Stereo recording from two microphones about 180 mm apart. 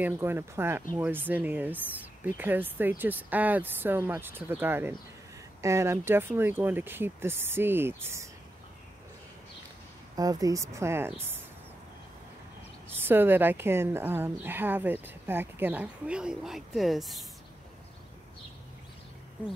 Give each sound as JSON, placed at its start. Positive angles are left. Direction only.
{"t": 0.0, "sound": "a woman's voice", "side_deg": -10}
{"t": 10.1, "sound": "a woman's voice", "side_deg": -20}
{"t": 12.9, "sound": "a woman's voice", "side_deg": -10}